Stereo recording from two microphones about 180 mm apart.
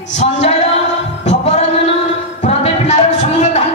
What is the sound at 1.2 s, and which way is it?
Singing, 35° left (ahead or behind).